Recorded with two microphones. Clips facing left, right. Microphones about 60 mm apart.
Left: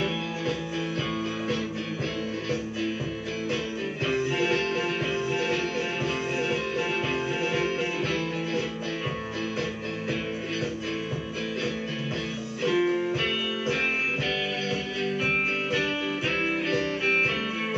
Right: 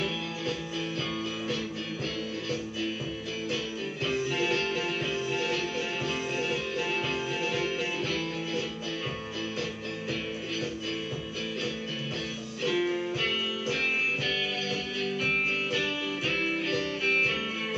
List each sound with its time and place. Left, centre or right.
4.0 s music: left
12.6 s music: left
16.6 s music: centre